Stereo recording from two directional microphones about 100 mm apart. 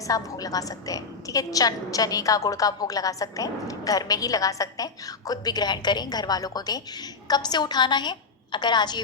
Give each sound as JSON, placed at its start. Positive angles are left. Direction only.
{"t": 0.1, "sound": "a woman's voice", "side_deg": 35}